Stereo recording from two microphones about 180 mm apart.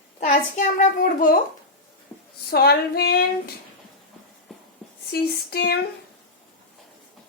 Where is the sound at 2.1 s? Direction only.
5° left (ahead or behind).